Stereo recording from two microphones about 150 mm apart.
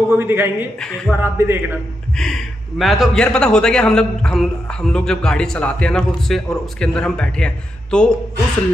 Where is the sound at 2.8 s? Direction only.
Centre (ahead or behind).